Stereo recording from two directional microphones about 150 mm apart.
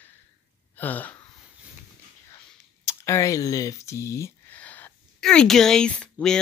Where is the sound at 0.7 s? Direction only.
10° left (ahead or behind).